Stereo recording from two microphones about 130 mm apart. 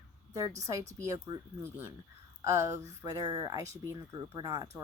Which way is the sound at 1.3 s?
30° right (ahead or behind).